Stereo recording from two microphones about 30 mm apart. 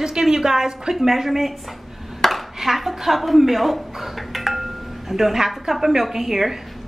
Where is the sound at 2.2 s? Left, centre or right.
Centre.